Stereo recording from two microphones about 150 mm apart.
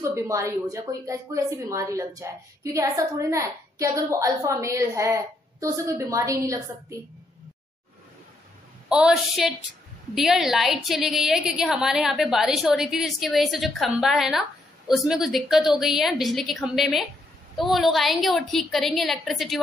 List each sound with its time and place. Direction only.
0.0 s speech: 20° right (ahead or behind)
8.8 s a woman's voice: 5° right (ahead or behind)